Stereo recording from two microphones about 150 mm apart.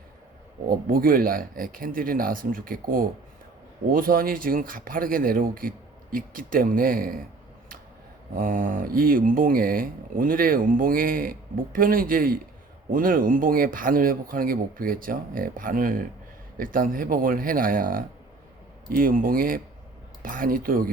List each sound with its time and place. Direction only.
0.7 s speech: 70° right (ahead or behind)
8.4 s speech: 65° right (ahead or behind)